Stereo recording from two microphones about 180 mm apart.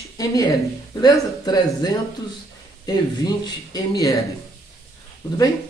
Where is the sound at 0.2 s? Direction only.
20° left (ahead or behind).